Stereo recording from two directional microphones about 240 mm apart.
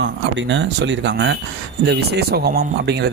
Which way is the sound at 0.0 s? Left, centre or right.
Right.